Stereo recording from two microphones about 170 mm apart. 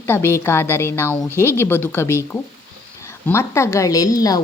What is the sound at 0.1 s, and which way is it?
A woman's voice, 15° left (ahead or behind).